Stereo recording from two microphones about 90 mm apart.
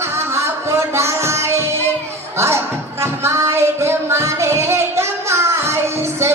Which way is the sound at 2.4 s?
30° right (ahead or behind).